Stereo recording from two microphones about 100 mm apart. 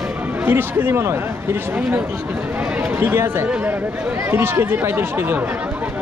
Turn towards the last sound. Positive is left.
turn(degrees=-20)  # may be behind; listen again after turning